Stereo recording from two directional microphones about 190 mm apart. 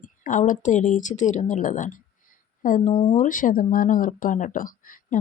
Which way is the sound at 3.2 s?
45° left (ahead or behind).